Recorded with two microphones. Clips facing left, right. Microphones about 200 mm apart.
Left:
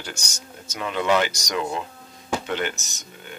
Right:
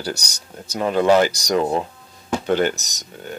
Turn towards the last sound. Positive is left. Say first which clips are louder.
# right 8 dB
turn(degrees=-40)  # may be behind; listen again after turning